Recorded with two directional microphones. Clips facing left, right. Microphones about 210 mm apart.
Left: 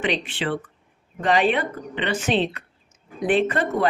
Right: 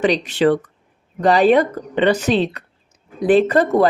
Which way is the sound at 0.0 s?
40° right (ahead or behind).